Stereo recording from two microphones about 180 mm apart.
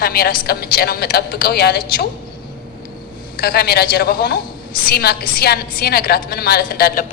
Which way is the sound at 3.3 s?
60° left (ahead or behind).